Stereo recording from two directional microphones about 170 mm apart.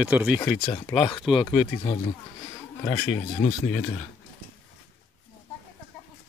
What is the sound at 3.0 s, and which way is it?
Speech, 35° left (ahead or behind).